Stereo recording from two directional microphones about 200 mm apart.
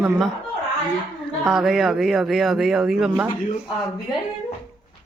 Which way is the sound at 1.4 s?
Centre (ahead or behind).